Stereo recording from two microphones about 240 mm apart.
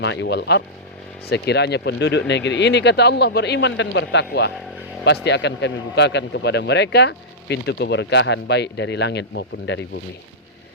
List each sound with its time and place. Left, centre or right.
0.0 s speech: left